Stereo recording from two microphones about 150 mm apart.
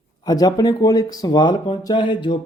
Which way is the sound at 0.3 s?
25° left (ahead or behind).